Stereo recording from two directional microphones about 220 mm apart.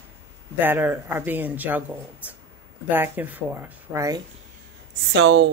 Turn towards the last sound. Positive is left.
turn(degrees=-55)  # may be behind; listen again after turning